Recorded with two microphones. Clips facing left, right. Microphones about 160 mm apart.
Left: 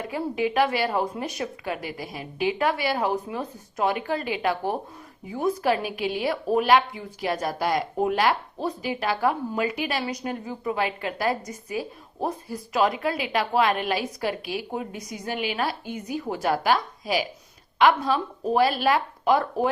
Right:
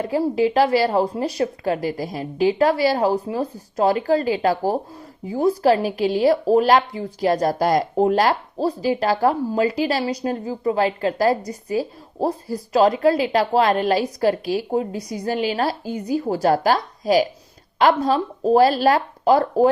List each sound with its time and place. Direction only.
0.0 s a woman's voice: 35° right (ahead or behind)